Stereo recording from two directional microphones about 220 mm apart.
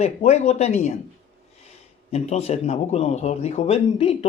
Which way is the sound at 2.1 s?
30° left (ahead or behind).